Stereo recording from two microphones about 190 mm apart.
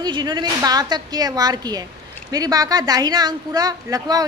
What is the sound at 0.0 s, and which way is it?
A woman's voice, 20° right (ahead or behind).